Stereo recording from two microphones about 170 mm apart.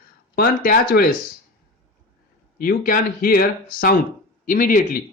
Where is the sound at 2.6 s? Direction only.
55° left (ahead or behind).